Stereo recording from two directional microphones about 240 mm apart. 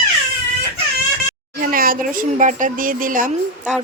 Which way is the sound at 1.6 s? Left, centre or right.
Right.